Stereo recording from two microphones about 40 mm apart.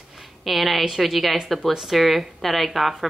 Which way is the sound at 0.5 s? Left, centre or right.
Centre.